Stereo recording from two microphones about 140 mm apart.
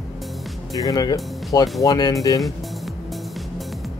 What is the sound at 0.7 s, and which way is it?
Speech, 25° left (ahead or behind).